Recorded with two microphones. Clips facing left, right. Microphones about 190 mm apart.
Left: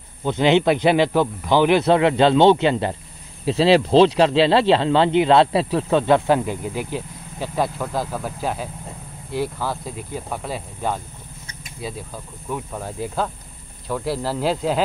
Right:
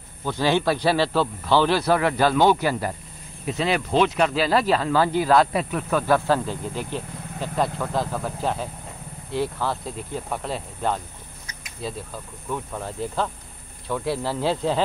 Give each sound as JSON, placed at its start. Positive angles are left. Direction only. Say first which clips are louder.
{"t": 0.2, "sound": "speech", "louder": "left 5 dB", "side_deg": 20}
{"t": 12.4, "sound": "speech", "louder": "left 1 dB", "side_deg": 5}